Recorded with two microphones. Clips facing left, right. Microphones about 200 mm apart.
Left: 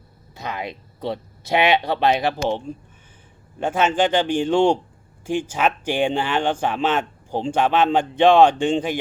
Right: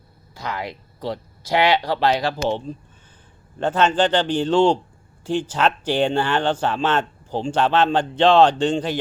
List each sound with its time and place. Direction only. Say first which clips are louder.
0.3 s speech: even; 20° left (ahead or behind)